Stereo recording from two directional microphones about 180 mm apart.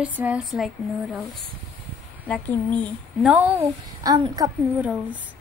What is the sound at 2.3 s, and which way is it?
Speech, 5° left (ahead or behind).